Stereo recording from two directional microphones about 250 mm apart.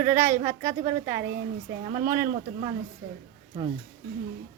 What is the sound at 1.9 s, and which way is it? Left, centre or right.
Speech, right.